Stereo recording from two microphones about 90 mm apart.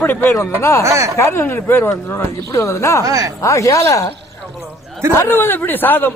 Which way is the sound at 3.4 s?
35° left (ahead or behind).